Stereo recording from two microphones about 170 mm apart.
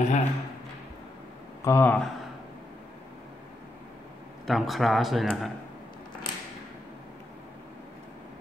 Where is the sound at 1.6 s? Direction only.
15° left (ahead or behind).